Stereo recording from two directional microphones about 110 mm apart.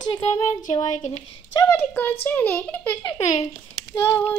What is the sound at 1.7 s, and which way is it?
Speech, 20° left (ahead or behind).